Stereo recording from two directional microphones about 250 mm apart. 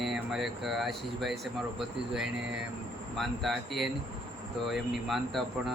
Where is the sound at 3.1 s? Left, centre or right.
Centre.